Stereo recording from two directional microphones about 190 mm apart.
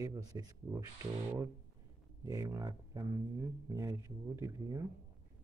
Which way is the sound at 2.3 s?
15° right (ahead or behind).